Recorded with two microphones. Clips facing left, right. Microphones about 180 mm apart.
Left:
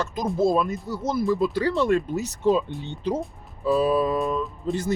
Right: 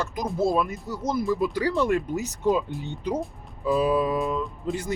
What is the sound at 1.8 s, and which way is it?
Speech, 15° right (ahead or behind).